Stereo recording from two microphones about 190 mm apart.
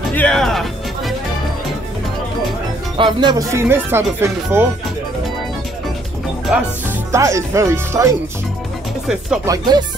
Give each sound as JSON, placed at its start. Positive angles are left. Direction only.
{"t": 0.1, "sound": "music", "side_deg": 5}
{"t": 3.0, "sound": "speech", "side_deg": -25}
{"t": 6.4, "sound": "speech", "side_deg": -5}
{"t": 7.1, "sound": "speech", "side_deg": -15}
{"t": 9.0, "sound": "speech", "side_deg": -5}
{"t": 9.5, "sound": "chopping", "side_deg": -20}